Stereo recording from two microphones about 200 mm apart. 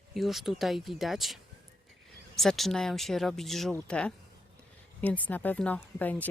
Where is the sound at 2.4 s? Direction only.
Centre (ahead or behind).